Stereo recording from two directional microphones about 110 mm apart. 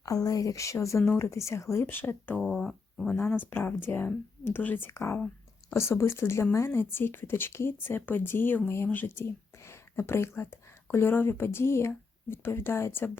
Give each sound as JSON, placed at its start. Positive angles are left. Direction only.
{"t": 0.0, "sound": "speech", "side_deg": 35}
{"t": 2.4, "sound": "speech", "side_deg": 5}
{"t": 3.1, "sound": "speech", "side_deg": 20}